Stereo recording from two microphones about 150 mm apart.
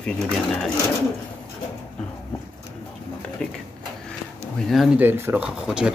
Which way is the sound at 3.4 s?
5° left (ahead or behind).